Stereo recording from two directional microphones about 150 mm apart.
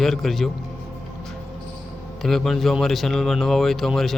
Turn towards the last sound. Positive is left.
turn(degrees=0)  # may be behind; listen again after turning